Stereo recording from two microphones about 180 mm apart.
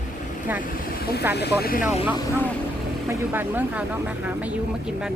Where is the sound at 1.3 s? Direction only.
60° left (ahead or behind).